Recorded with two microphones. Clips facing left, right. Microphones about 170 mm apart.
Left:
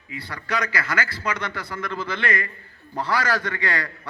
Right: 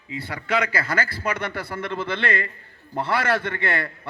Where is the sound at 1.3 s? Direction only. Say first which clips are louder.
Right 2 dB; 55° right (ahead or behind).